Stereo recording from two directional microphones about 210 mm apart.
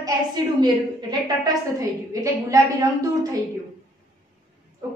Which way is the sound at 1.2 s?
15° right (ahead or behind).